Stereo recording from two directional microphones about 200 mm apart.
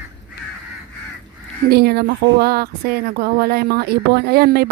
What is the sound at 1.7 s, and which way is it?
Speech, 50° right (ahead or behind).